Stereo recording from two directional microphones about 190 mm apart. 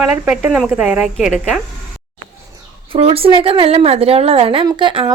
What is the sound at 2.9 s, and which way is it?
A woman's voice, 30° right (ahead or behind).